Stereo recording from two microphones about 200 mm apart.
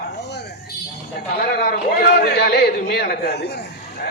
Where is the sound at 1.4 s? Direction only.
50° left (ahead or behind).